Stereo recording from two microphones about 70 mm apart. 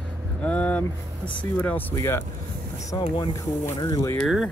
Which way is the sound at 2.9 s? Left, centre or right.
Left.